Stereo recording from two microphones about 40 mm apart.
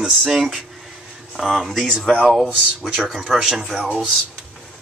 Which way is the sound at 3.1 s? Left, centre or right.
Centre.